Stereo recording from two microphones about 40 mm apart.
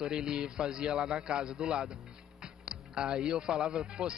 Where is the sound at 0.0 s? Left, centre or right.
Centre.